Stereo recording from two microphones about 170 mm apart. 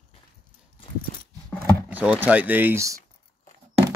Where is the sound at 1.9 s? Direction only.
10° right (ahead or behind).